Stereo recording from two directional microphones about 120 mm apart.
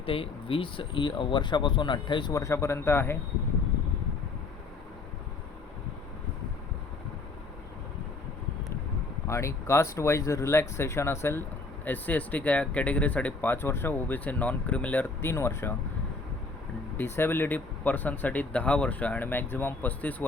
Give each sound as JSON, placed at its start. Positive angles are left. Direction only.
{"t": 0.0, "sound": "speech", "side_deg": 50}
{"t": 2.3, "sound": "speech", "side_deg": 25}
{"t": 9.2, "sound": "speech", "side_deg": 25}
{"t": 17.0, "sound": "speech", "side_deg": 15}